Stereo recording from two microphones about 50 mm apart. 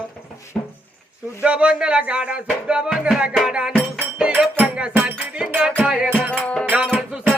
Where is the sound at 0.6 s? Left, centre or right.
Left.